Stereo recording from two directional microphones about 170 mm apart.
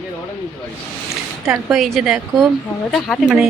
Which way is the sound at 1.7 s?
Centre (ahead or behind).